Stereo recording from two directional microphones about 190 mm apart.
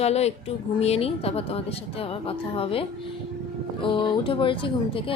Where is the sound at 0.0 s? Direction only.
35° left (ahead or behind).